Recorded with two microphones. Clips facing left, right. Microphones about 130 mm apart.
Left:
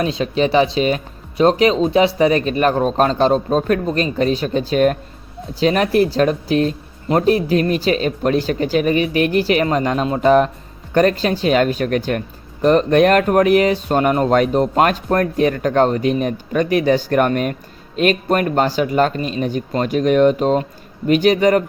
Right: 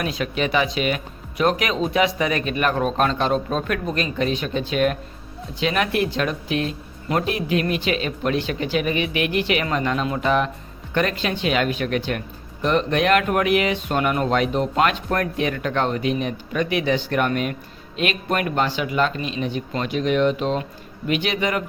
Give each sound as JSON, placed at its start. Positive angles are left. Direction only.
{"t": 0.0, "sound": "speech", "side_deg": 30}